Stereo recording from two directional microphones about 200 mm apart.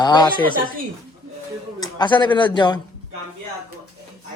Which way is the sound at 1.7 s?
20° left (ahead or behind).